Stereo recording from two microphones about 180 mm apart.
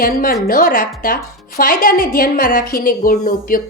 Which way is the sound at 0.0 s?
50° left (ahead or behind).